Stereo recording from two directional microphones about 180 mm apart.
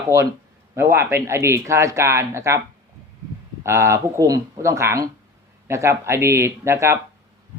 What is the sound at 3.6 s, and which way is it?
Speech, 15° right (ahead or behind).